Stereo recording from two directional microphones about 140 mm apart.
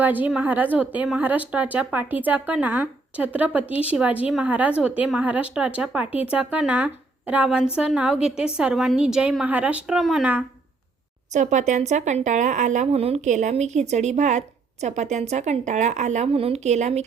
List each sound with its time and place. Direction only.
0.0 s a woman's voice: 10° right (ahead or behind)
11.3 s speech: 60° right (ahead or behind)